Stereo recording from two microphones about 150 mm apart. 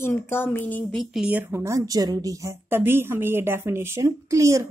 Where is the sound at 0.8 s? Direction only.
Centre (ahead or behind); by 4.6 s 20° right (ahead or behind).